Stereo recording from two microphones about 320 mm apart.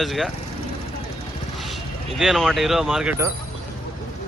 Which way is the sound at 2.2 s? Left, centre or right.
Centre.